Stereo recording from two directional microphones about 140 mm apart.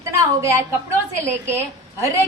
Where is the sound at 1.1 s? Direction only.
20° right (ahead or behind).